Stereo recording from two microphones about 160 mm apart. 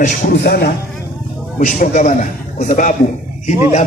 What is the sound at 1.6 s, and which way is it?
A man's voice, 50° left (ahead or behind).